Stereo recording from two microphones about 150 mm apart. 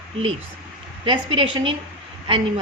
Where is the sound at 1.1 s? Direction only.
35° right (ahead or behind).